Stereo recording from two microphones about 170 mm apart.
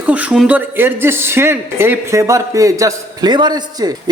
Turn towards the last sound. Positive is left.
turn(degrees=-25)  # may be behind; listen again after turning